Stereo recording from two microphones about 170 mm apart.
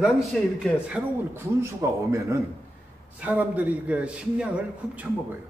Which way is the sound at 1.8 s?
15° right (ahead or behind).